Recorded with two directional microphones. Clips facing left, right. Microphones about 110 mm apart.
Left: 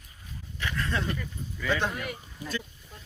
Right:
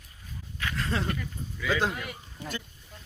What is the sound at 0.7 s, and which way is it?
Speech, 35° right (ahead or behind).